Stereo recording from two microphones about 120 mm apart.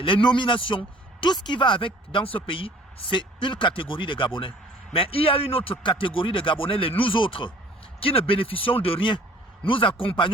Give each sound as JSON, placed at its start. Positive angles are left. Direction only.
{"t": 0.0, "sound": "speech", "side_deg": 40}